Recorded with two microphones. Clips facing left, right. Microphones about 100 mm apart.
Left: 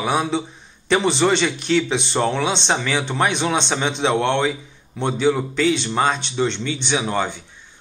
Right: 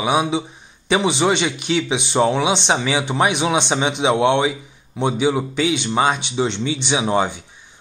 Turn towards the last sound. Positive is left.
turn(degrees=-15)  # may be behind; listen again after turning